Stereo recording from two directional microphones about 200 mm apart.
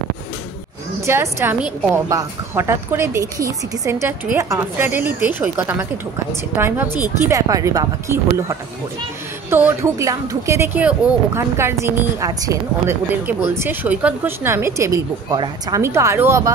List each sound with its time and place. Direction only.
1.0 s speech: 10° right (ahead or behind)